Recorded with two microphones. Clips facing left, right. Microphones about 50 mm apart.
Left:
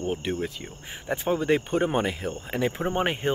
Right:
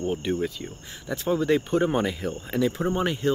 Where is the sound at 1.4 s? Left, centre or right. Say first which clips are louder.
Right 3 dB; centre.